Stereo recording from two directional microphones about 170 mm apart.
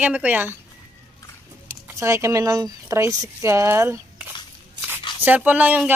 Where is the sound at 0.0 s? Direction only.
10° right (ahead or behind).